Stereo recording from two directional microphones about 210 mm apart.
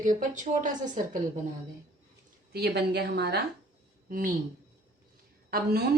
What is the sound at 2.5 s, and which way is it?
Speech, 50° right (ahead or behind).